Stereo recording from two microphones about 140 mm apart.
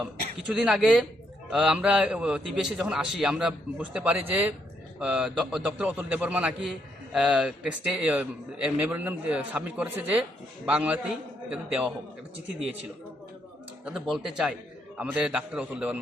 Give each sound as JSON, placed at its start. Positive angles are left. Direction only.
{"t": 0.0, "sound": "a man's voice", "side_deg": -5}
{"t": 12.5, "sound": "speech", "side_deg": -45}
{"t": 13.8, "sound": "a man's voice", "side_deg": -5}